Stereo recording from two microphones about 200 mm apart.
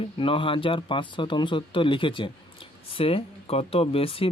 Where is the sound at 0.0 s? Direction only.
25° left (ahead or behind).